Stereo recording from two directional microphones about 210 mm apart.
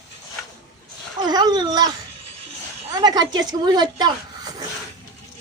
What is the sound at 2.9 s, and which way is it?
A woman's voice, 20° right (ahead or behind).